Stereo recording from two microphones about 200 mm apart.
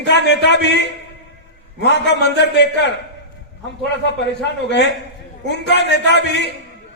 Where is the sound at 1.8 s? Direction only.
60° left (ahead or behind).